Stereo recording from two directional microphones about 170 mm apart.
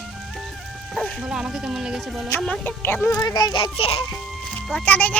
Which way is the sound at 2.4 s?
10° left (ahead or behind).